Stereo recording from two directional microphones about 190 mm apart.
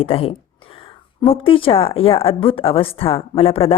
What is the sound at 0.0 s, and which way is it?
Speech, 30° left (ahead or behind).